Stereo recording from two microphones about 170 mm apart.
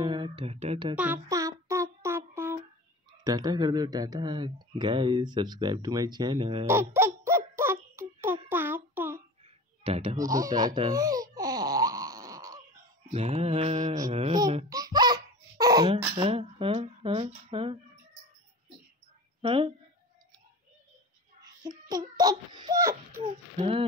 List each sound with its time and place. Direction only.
0.0 s speech: 30° right (ahead or behind)
0.9 s child singing: 10° right (ahead or behind)
3.3 s speech: 25° right (ahead or behind)
6.7 s baby laughter: 15° right (ahead or behind)
9.8 s speech: 35° right (ahead or behind)
10.1 s a sound: 20° right (ahead or behind)
13.1 s speech: 40° right (ahead or behind)
14.1 s speech: 30° right (ahead or behind)
14.7 s baby laughter: 20° right (ahead or behind)
15.6 s hiccup: 20° right (ahead or behind)
16.2 s speech: 35° right (ahead or behind)
19.4 s a woman's voice: 35° right (ahead or behind)
21.4 s child singing: 25° right (ahead or behind)
23.2 s a sound: 35° right (ahead or behind)